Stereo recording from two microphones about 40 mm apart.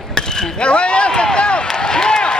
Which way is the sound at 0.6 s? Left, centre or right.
Left.